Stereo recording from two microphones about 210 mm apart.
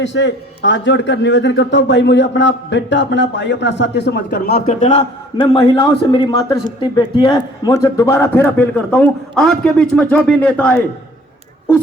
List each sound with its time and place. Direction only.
0.0 s a man's voice: 60° left (ahead or behind); by 5.0 s 35° left (ahead or behind)
5.4 s a man's voice: 25° left (ahead or behind); by 10.8 s 5° left (ahead or behind)